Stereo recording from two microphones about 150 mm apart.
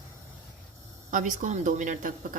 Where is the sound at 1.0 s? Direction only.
55° right (ahead or behind).